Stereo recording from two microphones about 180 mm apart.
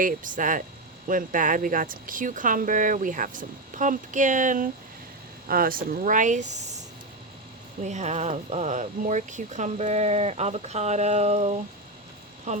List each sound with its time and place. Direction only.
0.0 s speech: 45° right (ahead or behind)
7.8 s speech: 40° right (ahead or behind)